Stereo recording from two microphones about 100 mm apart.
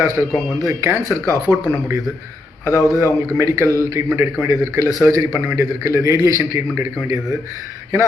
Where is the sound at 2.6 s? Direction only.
30° left (ahead or behind).